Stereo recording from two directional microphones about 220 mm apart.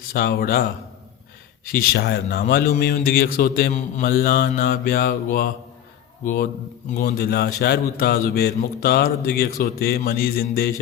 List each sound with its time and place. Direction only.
0.1 s a man's voice: 45° left (ahead or behind)